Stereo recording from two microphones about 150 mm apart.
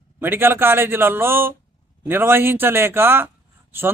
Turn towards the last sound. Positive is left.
turn(degrees=-15)  # may be behind; listen again after turning